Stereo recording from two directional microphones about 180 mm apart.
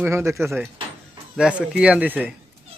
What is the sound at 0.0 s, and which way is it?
A man's voice, 15° right (ahead or behind).